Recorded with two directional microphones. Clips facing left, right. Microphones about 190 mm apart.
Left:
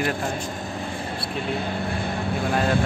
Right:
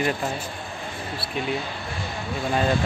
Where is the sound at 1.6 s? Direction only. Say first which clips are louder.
Left 6 dB; 55° left (ahead or behind).